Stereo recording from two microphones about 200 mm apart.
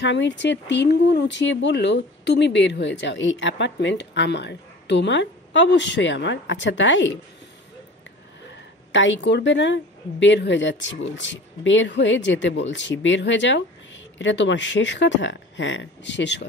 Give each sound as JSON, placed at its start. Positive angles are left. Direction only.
{"t": 0.0, "sound": "speech", "side_deg": 65}
{"t": 8.9, "sound": "speech", "side_deg": 65}